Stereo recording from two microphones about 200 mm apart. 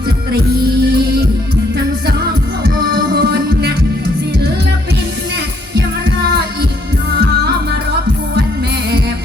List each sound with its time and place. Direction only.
0.3 s music: 55° right (ahead or behind)
5.7 s music: 60° right (ahead or behind)